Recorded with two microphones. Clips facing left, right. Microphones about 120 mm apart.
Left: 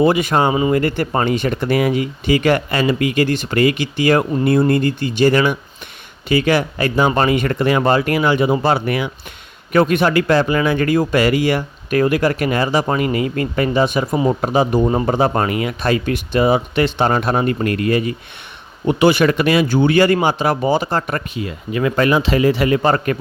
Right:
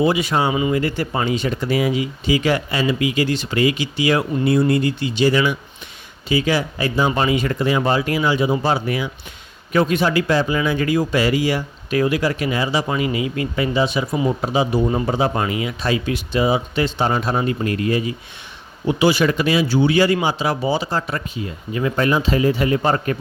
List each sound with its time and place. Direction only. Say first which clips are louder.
0.0 s speech: left 3 dB; 50° left (ahead or behind)
21.4 s speech: left 4 dB; 80° left